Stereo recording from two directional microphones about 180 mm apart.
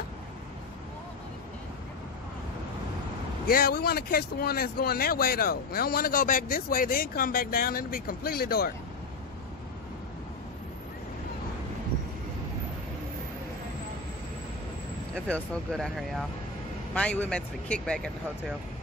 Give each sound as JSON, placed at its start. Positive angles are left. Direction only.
{"t": 3.4, "sound": "speech", "side_deg": 55}
{"t": 15.1, "sound": "speech", "side_deg": 5}